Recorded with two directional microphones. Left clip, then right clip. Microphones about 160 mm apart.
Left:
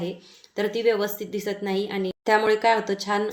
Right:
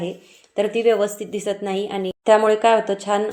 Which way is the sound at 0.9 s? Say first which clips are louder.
Right 5 dB; 45° right (ahead or behind).